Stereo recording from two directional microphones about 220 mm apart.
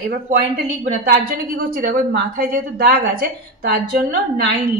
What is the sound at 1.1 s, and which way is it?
A woman's voice, 40° right (ahead or behind).